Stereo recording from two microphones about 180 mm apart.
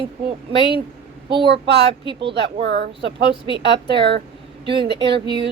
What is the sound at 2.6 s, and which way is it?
A woman's voice, 70° right (ahead or behind).